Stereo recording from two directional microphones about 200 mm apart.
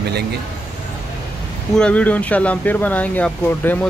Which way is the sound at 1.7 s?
5° left (ahead or behind).